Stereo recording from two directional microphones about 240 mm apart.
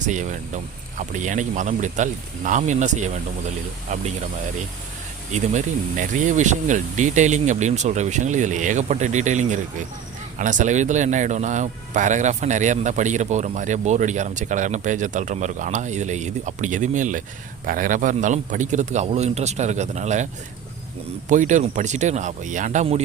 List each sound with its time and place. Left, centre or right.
0.0 s speech: right
5.3 s a man's voice: right
21.2 s a man's voice: right